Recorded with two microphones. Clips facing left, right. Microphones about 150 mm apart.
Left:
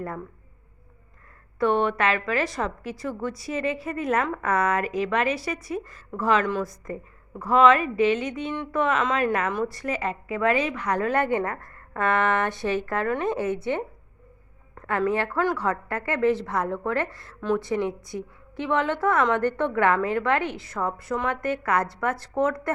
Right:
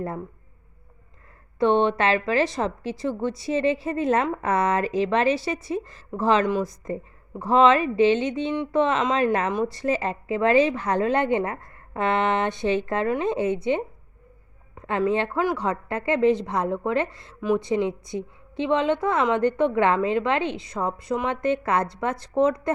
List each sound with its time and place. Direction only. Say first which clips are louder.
0.0 s a woman's voice: right 3 dB; 25° right (ahead or behind)
1.5 s a woman's voice: right 3 dB; 25° right (ahead or behind)
14.8 s a woman's voice: right 1 dB; 20° right (ahead or behind)